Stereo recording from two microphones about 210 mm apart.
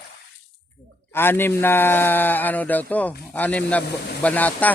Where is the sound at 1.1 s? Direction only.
10° left (ahead or behind).